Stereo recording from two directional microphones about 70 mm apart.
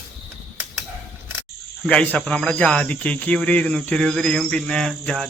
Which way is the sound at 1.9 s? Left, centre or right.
Centre.